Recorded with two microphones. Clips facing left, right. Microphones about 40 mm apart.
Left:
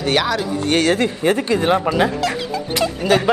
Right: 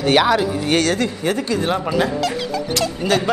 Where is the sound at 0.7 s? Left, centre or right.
Left.